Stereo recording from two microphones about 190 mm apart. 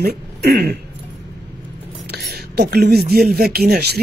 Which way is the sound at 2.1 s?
55° right (ahead or behind).